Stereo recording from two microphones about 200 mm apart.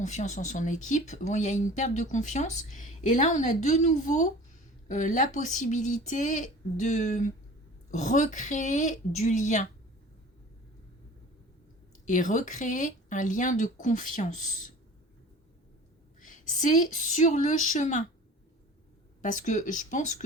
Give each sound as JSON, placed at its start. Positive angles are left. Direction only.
{"t": 0.0, "sound": "speech", "side_deg": 35}
{"t": 12.0, "sound": "speech", "side_deg": 40}
{"t": 16.2, "sound": "speech", "side_deg": 40}
{"t": 19.2, "sound": "speech", "side_deg": 40}